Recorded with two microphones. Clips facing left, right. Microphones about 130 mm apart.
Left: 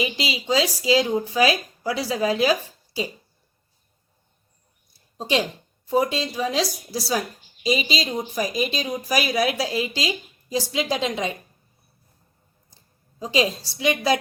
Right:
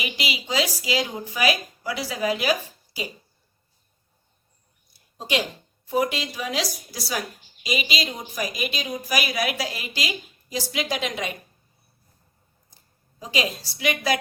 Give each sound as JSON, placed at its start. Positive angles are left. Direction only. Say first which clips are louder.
{"t": 0.0, "sound": "a woman's voice", "louder": "left 4 dB", "side_deg": 30}
{"t": 5.1, "sound": "a woman's voice", "louder": "left 3 dB", "side_deg": 30}
{"t": 13.1, "sound": "a woman's voice", "louder": "left 5 dB", "side_deg": 30}